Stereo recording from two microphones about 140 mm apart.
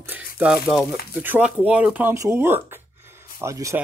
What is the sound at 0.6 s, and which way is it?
Speech, centre (ahead or behind).